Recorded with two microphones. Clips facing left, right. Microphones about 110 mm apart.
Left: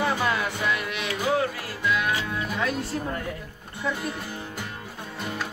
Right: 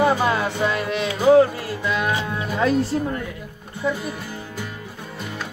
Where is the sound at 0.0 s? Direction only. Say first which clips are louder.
Right 6 dB; 30° right (ahead or behind).